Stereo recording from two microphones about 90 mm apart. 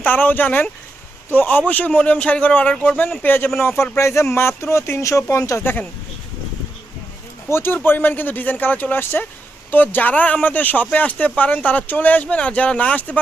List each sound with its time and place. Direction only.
0.0 s speech: 20° left (ahead or behind); by 5.6 s 35° left (ahead or behind)
7.5 s speech: 25° left (ahead or behind)